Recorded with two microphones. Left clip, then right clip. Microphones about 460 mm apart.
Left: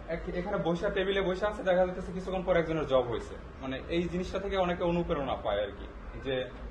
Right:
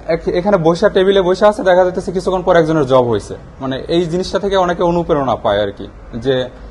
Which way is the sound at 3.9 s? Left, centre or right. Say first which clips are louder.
Right 18 dB; right.